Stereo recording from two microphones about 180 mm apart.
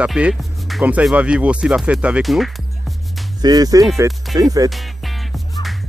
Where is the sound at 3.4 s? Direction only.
20° right (ahead or behind).